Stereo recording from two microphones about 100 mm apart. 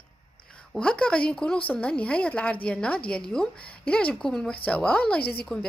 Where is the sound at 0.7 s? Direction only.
10° left (ahead or behind).